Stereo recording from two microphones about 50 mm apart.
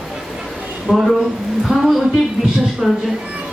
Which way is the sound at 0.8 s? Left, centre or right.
Centre.